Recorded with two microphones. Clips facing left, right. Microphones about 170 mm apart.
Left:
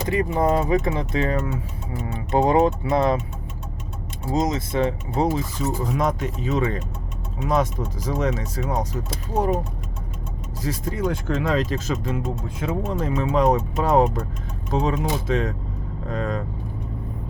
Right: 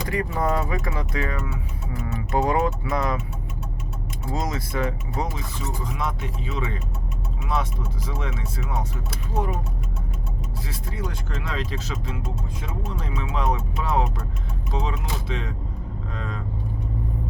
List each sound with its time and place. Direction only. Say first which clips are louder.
0.0 s speech: left 4 dB; 20° left (ahead or behind)
4.3 s speech: left 6 dB; 20° left (ahead or behind)
5.8 s speech: left 6 dB; 45° left (ahead or behind)
10.6 s speech: left 10 dB; 45° left (ahead or behind)